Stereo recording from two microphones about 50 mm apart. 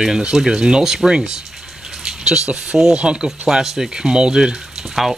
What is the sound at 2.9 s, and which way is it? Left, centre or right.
Speech, right.